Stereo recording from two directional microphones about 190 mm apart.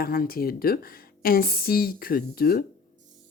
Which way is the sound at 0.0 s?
50° left (ahead or behind).